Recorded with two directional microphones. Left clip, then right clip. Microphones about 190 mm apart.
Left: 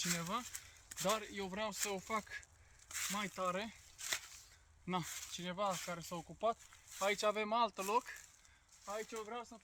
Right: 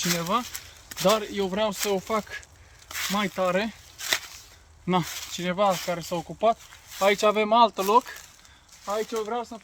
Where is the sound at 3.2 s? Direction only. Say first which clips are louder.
Right 16 dB; 5° left (ahead or behind).